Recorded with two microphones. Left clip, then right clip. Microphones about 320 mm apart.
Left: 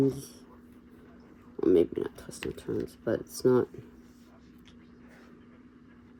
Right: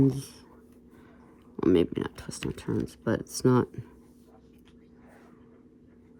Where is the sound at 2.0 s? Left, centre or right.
Right.